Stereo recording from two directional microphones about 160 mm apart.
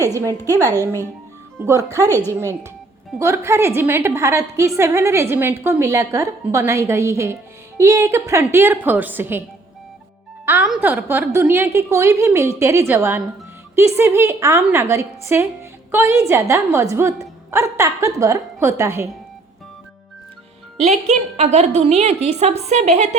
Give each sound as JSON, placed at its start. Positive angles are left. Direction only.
{"t": 0.0, "sound": "speech", "side_deg": -20}
{"t": 0.3, "sound": "a woman's voice", "side_deg": 15}
{"t": 1.5, "sound": "speech", "side_deg": -15}
{"t": 3.2, "sound": "a woman's voice", "side_deg": -15}
{"t": 10.4, "sound": "a woman's voice", "side_deg": -10}
{"t": 21.3, "sound": "a woman's voice", "side_deg": -40}